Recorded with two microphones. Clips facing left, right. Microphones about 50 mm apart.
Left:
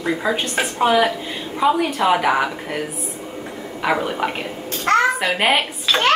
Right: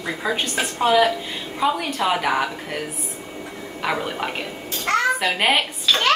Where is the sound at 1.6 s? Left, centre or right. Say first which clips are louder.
Left 4 dB; centre.